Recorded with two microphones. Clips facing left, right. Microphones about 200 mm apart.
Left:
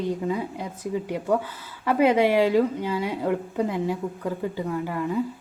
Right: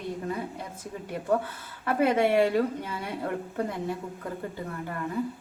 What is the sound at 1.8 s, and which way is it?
Speech, 90° left.